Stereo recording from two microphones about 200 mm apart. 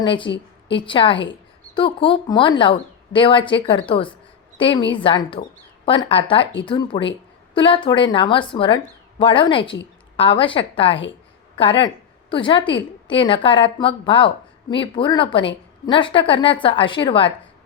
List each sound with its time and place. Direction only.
0.0 s a woman's voice: 25° left (ahead or behind)
6.4 s speech: 60° left (ahead or behind)
6.7 s a woman's voice: 25° left (ahead or behind)